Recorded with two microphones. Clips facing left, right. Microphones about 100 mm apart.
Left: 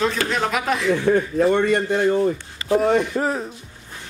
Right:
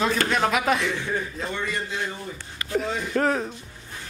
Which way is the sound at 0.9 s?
55° left (ahead or behind).